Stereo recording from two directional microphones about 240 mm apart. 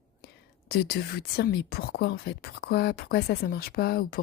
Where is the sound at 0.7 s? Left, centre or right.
Left.